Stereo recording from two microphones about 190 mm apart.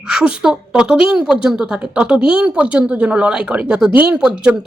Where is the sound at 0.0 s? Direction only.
5° right (ahead or behind).